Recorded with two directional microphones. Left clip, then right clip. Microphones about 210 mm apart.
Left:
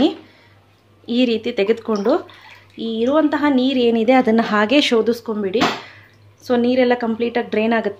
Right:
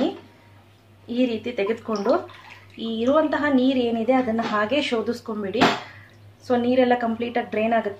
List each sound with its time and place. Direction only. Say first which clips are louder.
1.0 s a woman's voice: left 6 dB; 40° left (ahead or behind)